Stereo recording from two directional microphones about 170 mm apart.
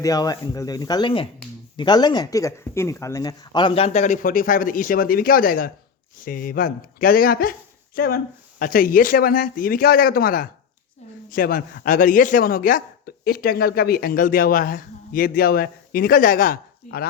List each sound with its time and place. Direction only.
0.0 s speech: 20° left (ahead or behind); by 17.1 s 60° left (ahead or behind)